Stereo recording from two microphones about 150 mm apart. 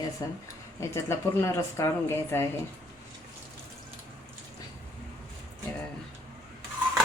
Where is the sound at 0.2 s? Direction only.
25° left (ahead or behind).